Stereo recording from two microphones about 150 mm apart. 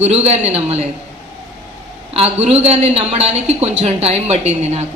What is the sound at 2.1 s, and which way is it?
A woman's voice, 45° right (ahead or behind).